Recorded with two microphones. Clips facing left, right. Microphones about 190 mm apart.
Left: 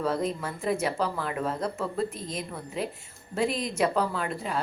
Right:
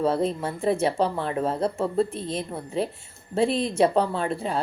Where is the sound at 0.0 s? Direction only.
30° right (ahead or behind).